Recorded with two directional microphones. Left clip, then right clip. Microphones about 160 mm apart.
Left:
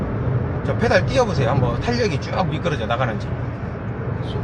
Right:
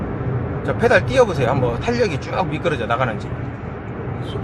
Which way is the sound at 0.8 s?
25° right (ahead or behind).